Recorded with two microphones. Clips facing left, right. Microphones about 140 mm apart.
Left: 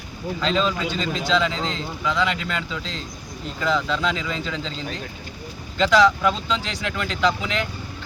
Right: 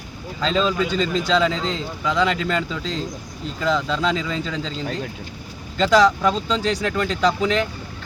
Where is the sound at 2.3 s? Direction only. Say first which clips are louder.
Right 5 dB; 35° right (ahead or behind).